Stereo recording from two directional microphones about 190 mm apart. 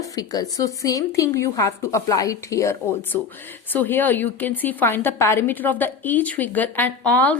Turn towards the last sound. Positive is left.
turn(degrees=5)  # may be behind; listen again after turning